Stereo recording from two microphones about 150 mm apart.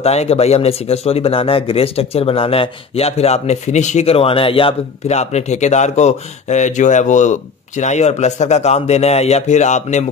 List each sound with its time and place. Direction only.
0.0 s speech: 45° left (ahead or behind)